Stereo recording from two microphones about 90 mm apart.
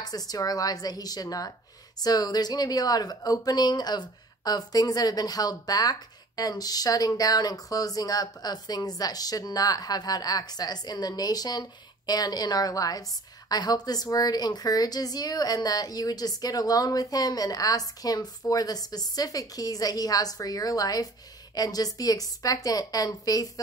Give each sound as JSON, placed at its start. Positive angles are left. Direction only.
{"t": 0.0, "sound": "a woman's voice", "side_deg": 45}